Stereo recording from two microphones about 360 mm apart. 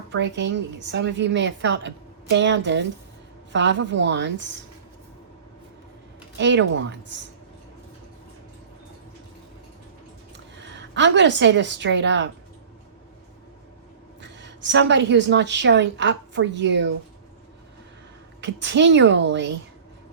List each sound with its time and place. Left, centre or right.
0.1 s a woman's voice: right
6.4 s a woman's voice: right
10.6 s a woman's voice: right
14.2 s a woman's voice: right
18.3 s a woman's voice: right